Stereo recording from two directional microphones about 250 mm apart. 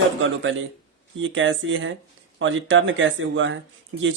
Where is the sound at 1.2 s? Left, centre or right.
Right.